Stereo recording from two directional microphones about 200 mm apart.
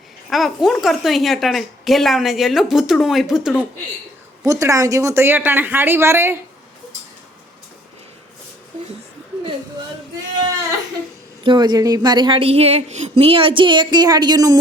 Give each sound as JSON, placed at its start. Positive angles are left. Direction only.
{"t": 0.3, "sound": "speech", "side_deg": 0}
{"t": 4.4, "sound": "speech", "side_deg": -15}
{"t": 11.4, "sound": "a woman's voice", "side_deg": -20}